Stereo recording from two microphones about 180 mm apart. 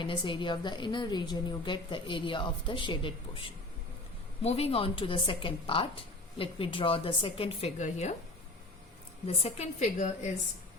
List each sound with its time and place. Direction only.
0.0 s a woman's voice: 25° left (ahead or behind)
4.4 s a woman's voice: 35° left (ahead or behind)
9.2 s a woman's voice: 35° left (ahead or behind)